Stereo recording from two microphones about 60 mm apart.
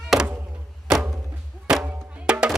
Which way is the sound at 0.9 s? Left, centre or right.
Centre.